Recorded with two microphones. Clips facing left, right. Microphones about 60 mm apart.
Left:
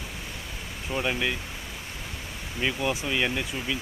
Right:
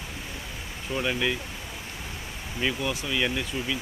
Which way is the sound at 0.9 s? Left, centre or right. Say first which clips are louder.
Even; centre.